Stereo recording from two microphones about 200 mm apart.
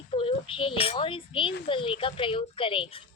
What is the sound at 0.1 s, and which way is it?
A child's voice, 30° left (ahead or behind).